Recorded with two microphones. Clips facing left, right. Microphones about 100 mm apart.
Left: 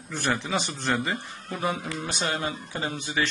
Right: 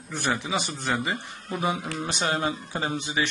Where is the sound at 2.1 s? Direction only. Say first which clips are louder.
Right 3 dB; 25° right (ahead or behind).